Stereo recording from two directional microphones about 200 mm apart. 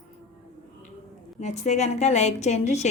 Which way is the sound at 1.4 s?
35° left (ahead or behind).